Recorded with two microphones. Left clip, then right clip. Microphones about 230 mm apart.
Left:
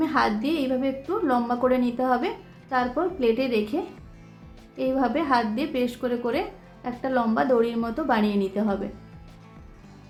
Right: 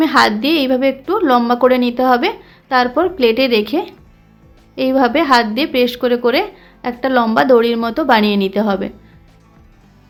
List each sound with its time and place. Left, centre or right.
0.0 s a woman's voice: right